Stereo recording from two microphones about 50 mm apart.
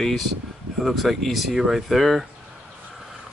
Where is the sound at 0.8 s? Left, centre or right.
Centre.